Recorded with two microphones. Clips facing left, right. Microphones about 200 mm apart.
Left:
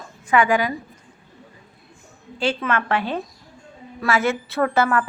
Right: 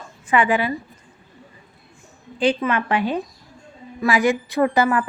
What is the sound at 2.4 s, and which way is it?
Speech, 15° right (ahead or behind).